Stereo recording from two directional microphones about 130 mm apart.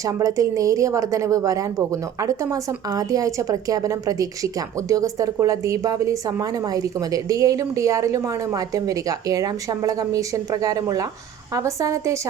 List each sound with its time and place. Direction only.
0.0 s a woman's voice: 25° right (ahead or behind)